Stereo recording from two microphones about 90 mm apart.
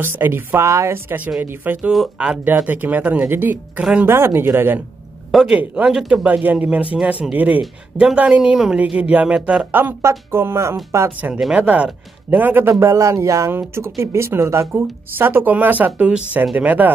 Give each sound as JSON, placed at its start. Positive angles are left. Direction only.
{"t": 0.0, "sound": "speech", "side_deg": -25}
{"t": 1.9, "sound": "speech", "side_deg": -5}
{"t": 2.4, "sound": "speech", "side_deg": -20}
{"t": 5.3, "sound": "speech", "side_deg": 0}
{"t": 6.2, "sound": "speech", "side_deg": -15}
{"t": 11.1, "sound": "speech", "side_deg": -20}
{"t": 12.6, "sound": "speech", "side_deg": -35}